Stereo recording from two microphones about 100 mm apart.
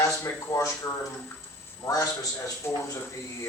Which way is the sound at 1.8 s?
35° left (ahead or behind).